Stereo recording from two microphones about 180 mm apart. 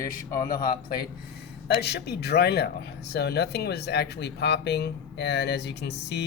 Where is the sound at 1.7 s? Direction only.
65° left (ahead or behind).